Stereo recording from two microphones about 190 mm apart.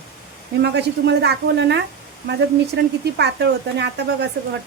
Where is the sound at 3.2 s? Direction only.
60° right (ahead or behind).